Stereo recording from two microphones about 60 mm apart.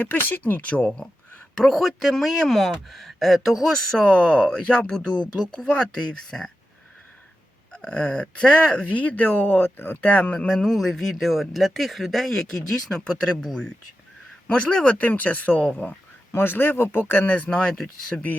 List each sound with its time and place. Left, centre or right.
0.0 s speech: left
0.7 s speech: centre
1.5 s speech: centre
7.7 s speech: centre
9.0 s speech: left
10.0 s speech: left
10.6 s speech: centre
16.3 s speech: left; by 17.7 s centre
18.1 s speech: centre